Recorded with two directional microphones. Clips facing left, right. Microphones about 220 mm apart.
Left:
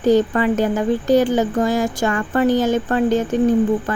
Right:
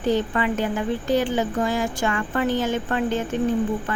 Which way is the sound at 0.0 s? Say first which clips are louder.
Left 7 dB; 40° left (ahead or behind).